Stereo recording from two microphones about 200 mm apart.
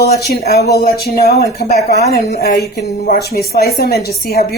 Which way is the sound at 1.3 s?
35° left (ahead or behind).